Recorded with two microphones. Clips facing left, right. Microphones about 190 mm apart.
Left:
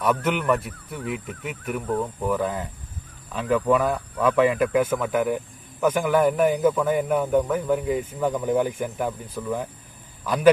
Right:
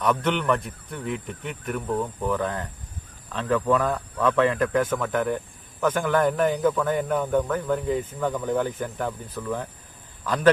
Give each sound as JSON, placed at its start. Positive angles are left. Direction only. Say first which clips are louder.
{"t": 0.0, "sound": "speech", "louder": "left 1 dB", "side_deg": 5}